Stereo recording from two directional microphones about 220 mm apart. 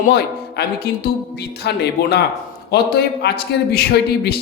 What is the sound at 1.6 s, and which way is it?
Speech, 50° left (ahead or behind).